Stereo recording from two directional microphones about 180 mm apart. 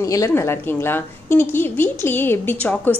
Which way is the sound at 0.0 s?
15° left (ahead or behind).